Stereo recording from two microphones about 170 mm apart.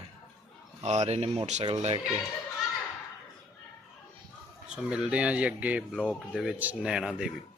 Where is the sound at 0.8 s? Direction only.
40° right (ahead or behind).